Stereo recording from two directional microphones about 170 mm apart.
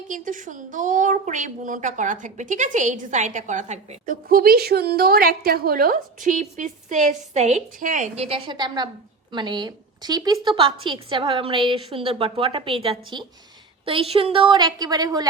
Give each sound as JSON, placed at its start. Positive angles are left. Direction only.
{"t": 0.1, "sound": "a woman's voice", "side_deg": -50}